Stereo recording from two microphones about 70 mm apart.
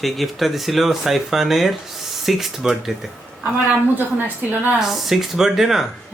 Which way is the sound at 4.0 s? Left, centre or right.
Right.